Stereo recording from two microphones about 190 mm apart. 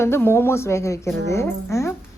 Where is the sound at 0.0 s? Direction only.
10° left (ahead or behind).